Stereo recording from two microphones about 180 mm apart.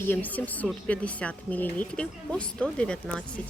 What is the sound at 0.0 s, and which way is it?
A woman's voice, 10° left (ahead or behind).